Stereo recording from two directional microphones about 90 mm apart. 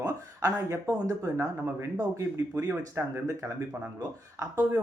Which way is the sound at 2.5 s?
25° right (ahead or behind).